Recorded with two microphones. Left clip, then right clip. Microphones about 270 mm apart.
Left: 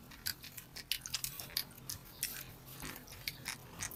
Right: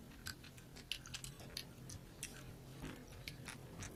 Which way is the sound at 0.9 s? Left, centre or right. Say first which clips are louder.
Left 7 dB; centre.